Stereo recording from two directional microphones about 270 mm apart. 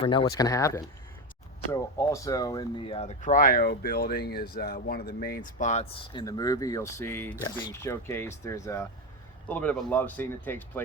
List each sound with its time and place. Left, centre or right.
0.0 s speech: centre